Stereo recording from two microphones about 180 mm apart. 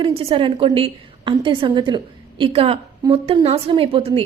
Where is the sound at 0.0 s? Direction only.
30° right (ahead or behind).